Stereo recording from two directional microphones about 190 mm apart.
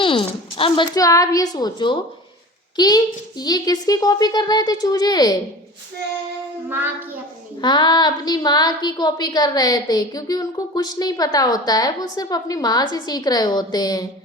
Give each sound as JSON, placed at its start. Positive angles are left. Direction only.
{"t": 0.0, "sound": "a woman's voice", "side_deg": 25}
{"t": 6.7, "sound": "child singing", "side_deg": -10}
{"t": 7.6, "sound": "speech", "side_deg": 25}